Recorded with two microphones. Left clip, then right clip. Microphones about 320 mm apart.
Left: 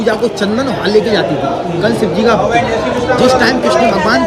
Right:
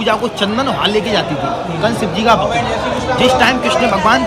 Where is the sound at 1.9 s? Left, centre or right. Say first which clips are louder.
Left 4 dB; centre.